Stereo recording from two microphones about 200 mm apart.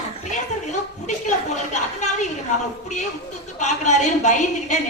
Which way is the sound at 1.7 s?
35° left (ahead or behind).